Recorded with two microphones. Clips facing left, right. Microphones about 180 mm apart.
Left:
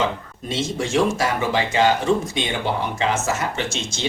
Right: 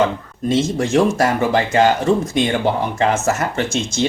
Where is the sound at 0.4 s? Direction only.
50° right (ahead or behind).